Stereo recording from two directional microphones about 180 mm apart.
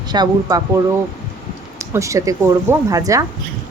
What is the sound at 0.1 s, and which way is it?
Speech, 20° right (ahead or behind).